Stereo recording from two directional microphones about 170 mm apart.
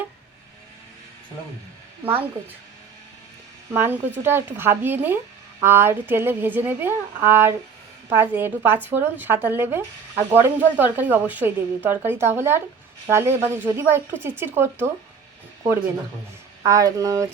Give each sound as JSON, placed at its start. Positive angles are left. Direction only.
{"t": 3.7, "sound": "speech", "side_deg": -10}
{"t": 16.6, "sound": "speech", "side_deg": -20}